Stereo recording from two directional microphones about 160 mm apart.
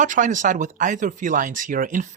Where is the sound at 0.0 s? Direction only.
55° right (ahead or behind).